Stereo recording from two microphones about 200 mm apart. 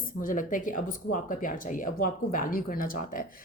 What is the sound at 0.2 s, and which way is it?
Speech, 45° left (ahead or behind).